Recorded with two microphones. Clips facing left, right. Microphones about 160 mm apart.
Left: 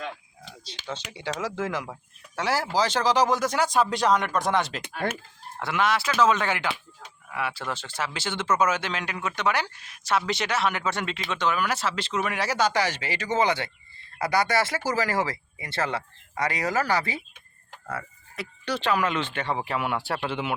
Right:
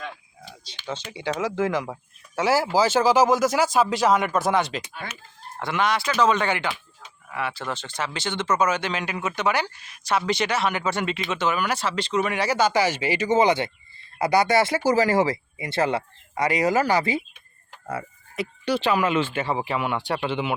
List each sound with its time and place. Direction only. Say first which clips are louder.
0.7 s speech: right 3 dB; centre (ahead or behind)
5.0 s speech: left 9 dB; 70° left (ahead or behind)
5.5 s speech: right 1 dB; 5° left (ahead or behind)